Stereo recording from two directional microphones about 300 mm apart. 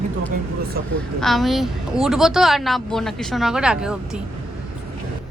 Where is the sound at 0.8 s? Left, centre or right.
Right.